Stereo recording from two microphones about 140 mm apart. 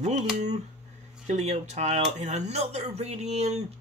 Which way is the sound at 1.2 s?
50° right (ahead or behind).